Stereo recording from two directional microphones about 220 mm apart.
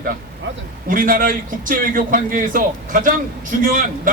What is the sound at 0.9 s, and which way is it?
A man's voice, 40° right (ahead or behind).